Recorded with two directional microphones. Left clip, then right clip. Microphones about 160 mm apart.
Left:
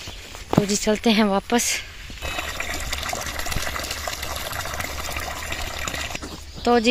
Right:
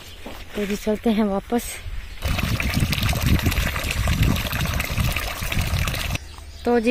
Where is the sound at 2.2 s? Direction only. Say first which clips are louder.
Right 1 dB; 20° right (ahead or behind).